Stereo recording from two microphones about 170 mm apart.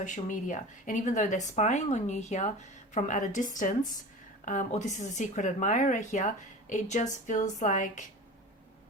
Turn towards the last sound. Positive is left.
turn(degrees=45)  # may be behind; listen again after turning